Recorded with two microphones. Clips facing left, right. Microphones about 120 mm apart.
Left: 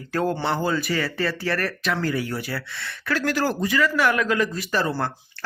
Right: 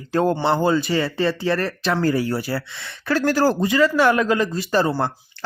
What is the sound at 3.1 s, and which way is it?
Speech, 35° right (ahead or behind).